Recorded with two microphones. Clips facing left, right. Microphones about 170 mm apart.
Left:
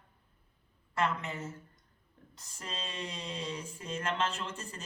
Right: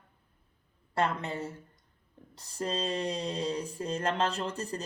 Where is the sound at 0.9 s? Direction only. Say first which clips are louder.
Right 3 dB; 35° right (ahead or behind).